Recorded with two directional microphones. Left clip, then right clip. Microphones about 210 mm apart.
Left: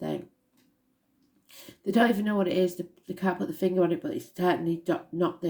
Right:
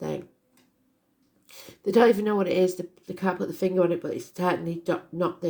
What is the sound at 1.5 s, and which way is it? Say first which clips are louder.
Speech: right 6 dB; 25° right (ahead or behind).